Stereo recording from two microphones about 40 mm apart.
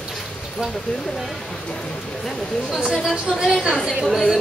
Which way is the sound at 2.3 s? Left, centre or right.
Centre.